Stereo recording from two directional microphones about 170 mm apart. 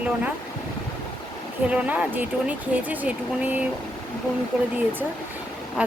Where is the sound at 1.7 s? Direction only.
10° right (ahead or behind).